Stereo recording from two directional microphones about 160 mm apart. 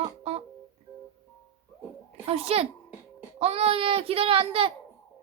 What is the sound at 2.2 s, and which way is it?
A child's voice, 40° right (ahead or behind).